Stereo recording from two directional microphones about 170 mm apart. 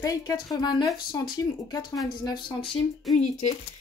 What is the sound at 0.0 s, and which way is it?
Speech, 20° left (ahead or behind).